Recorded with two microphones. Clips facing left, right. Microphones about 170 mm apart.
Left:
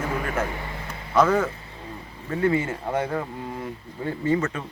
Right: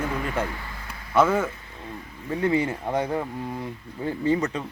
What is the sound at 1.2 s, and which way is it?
Speech, 10° right (ahead or behind).